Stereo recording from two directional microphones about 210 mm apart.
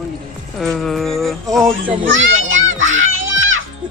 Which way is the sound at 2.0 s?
65° right (ahead or behind).